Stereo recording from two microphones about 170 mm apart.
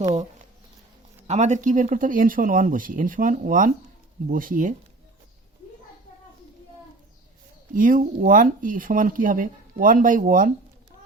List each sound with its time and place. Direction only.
1.3 s speech: 45° right (ahead or behind)
7.7 s speech: 50° right (ahead or behind)